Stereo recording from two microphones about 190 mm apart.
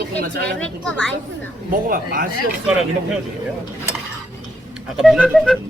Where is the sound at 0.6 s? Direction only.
5° left (ahead or behind).